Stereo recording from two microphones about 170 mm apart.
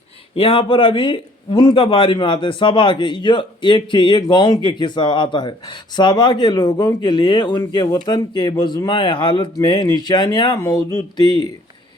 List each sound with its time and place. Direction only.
0.3 s a man's voice: 30° left (ahead or behind)